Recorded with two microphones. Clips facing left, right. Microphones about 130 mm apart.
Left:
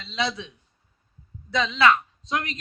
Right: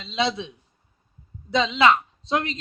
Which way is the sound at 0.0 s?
20° right (ahead or behind).